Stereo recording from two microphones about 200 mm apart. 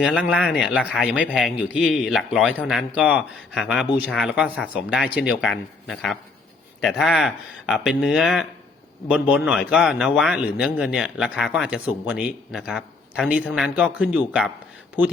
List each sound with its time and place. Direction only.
0.0 s speech: 5° right (ahead or behind)